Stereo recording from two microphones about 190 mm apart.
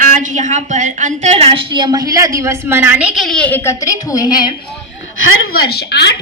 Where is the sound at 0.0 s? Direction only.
40° right (ahead or behind); by 4.5 s 20° left (ahead or behind).